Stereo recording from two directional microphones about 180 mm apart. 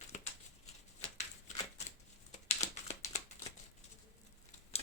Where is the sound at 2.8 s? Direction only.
35° left (ahead or behind).